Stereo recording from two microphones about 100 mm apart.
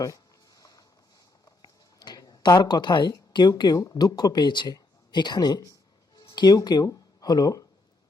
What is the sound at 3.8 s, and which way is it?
Speech, 35° left (ahead or behind).